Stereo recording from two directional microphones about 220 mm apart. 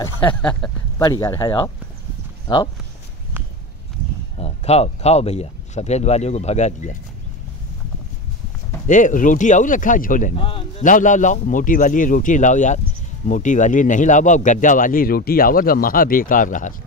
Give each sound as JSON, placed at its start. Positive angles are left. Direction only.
{"t": 0.2, "sound": "speech", "side_deg": 5}
{"t": 1.2, "sound": "speech", "side_deg": 15}
{"t": 3.3, "sound": "walk", "side_deg": -10}
{"t": 4.4, "sound": "speech", "side_deg": 30}
{"t": 8.8, "sound": "speech", "side_deg": 35}
{"t": 10.4, "sound": "speech", "side_deg": 25}
{"t": 10.8, "sound": "speech", "side_deg": 35}